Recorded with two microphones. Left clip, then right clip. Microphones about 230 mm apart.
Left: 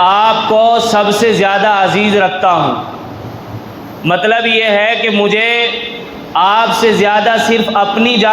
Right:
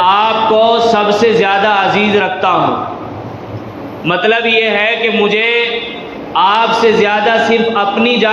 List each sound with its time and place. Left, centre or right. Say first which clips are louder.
0.0 s a man's voice: left 1 dB; left
4.0 s a man's voice: left 1 dB; left